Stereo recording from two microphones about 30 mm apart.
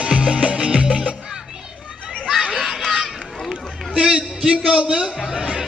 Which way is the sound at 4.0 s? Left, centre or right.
Right.